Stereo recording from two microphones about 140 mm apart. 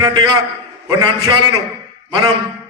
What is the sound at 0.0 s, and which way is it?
A man's voice, 35° right (ahead or behind).